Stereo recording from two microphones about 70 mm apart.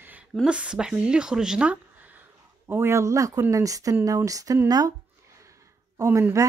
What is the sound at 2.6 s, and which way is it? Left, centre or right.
Speech, right.